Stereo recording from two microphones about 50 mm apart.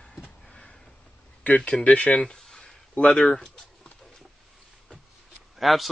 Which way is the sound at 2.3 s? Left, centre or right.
Centre.